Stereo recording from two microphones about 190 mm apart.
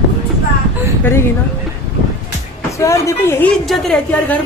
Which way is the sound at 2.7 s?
15° left (ahead or behind).